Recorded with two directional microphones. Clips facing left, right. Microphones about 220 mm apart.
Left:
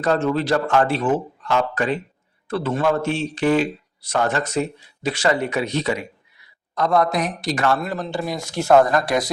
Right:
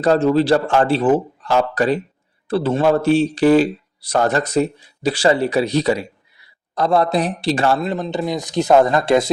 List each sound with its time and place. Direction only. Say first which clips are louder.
0.0 s speech: right 5 dB; 35° right (ahead or behind)